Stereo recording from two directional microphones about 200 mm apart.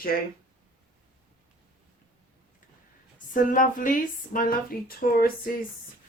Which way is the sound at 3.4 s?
40° left (ahead or behind).